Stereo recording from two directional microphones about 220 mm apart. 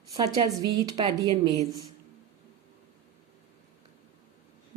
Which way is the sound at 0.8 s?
15° right (ahead or behind).